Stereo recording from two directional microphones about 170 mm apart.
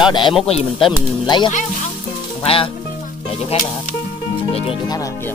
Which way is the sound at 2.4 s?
35° left (ahead or behind).